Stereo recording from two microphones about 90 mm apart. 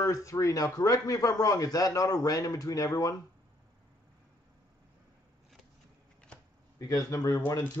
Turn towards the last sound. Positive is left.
turn(degrees=35)  # may be behind; listen again after turning